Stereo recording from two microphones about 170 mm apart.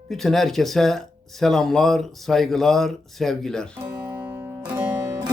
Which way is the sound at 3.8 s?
10° right (ahead or behind).